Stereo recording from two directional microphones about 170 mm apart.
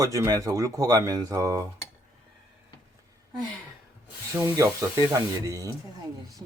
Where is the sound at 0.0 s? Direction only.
20° right (ahead or behind).